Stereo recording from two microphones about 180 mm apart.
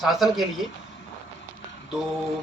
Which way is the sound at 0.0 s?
Centre (ahead or behind).